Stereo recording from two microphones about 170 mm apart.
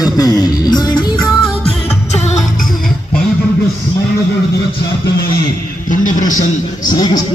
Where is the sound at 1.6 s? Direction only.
40° left (ahead or behind).